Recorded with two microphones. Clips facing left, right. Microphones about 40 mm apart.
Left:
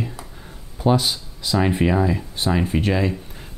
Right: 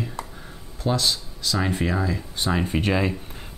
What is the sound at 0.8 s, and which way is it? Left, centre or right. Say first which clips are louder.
Speech: left 5 dB; centre.